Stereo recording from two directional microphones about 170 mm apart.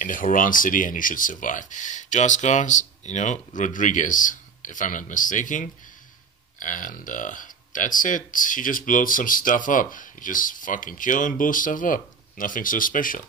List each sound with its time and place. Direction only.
0.0 s speech: 50° left (ahead or behind)